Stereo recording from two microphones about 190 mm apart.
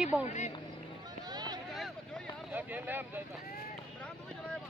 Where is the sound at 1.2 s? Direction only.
20° right (ahead or behind).